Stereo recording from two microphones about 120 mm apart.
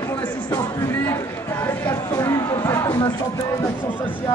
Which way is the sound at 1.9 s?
20° left (ahead or behind).